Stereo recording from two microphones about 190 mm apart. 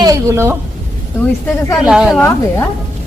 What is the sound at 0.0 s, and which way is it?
Speech, 15° right (ahead or behind).